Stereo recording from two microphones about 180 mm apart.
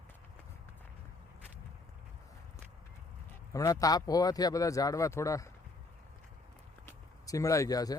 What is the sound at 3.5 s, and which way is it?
Speech, 20° left (ahead or behind).